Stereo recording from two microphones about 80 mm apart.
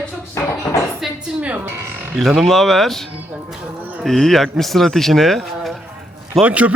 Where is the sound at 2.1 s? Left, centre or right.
Centre.